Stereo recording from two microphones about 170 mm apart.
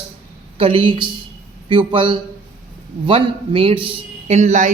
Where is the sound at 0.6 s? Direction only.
30° right (ahead or behind).